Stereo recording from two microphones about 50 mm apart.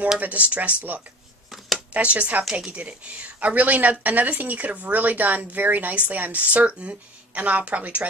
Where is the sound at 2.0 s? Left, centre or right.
Right.